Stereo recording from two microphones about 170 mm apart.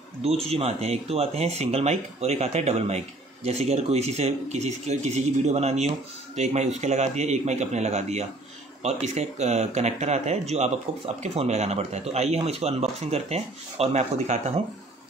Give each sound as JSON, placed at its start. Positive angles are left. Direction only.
{"t": 0.2, "sound": "speech", "side_deg": -35}